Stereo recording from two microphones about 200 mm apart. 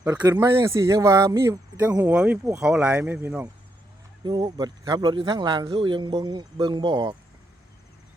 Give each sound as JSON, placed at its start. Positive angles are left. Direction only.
{"t": 0.0, "sound": "speech", "side_deg": -20}